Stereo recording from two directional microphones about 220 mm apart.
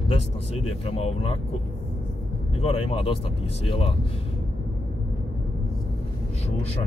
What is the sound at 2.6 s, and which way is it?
Speech, 25° left (ahead or behind).